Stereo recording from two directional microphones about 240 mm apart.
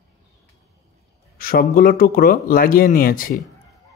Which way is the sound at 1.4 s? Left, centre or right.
Left.